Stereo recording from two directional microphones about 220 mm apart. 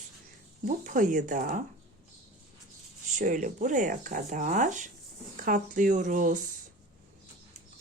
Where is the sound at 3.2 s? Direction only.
35° right (ahead or behind).